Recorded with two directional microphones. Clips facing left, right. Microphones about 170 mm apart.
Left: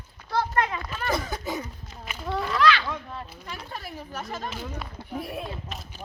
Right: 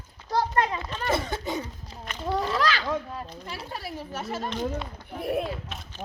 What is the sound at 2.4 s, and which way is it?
A child's voice, 35° right (ahead or behind).